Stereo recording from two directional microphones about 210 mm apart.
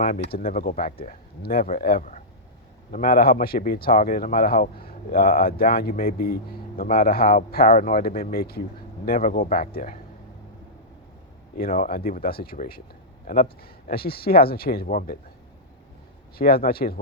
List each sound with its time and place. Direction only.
0.0 s a man's voice: 45° left (ahead or behind)
11.5 s a man's voice: 40° left (ahead or behind)
16.4 s a man's voice: 45° left (ahead or behind)